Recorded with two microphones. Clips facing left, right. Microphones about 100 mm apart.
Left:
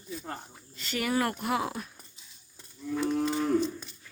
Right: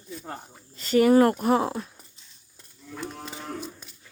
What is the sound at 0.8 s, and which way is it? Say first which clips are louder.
Speech: right 12 dB; 35° right (ahead or behind).